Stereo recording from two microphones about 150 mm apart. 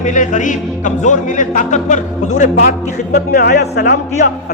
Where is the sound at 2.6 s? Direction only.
70° left (ahead or behind).